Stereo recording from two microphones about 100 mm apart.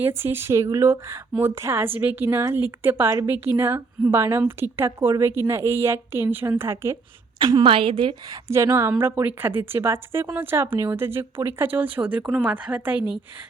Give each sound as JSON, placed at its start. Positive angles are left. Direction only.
{"t": 0.0, "sound": "a woman's voice", "side_deg": -25}
{"t": 7.6, "sound": "a woman's voice", "side_deg": -65}
{"t": 8.3, "sound": "a woman's voice", "side_deg": -30}